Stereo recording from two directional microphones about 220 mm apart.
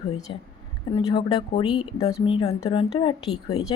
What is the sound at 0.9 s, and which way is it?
A woman's voice, 20° left (ahead or behind).